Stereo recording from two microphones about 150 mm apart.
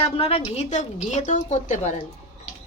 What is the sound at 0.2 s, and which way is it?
A woman's voice, 40° left (ahead or behind).